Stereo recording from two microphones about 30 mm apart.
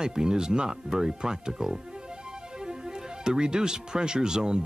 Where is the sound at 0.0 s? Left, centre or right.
Right.